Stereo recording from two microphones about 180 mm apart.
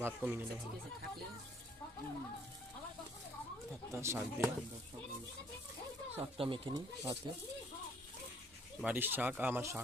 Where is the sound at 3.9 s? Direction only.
15° right (ahead or behind).